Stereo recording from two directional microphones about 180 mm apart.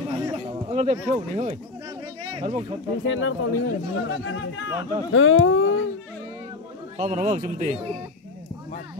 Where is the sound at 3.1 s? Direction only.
90° left.